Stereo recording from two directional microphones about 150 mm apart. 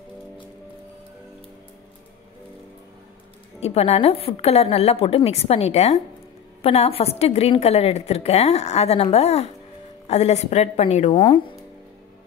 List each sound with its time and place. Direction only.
3.6 s a woman's voice: 45° left (ahead or behind)
11.1 s speech: 35° left (ahead or behind)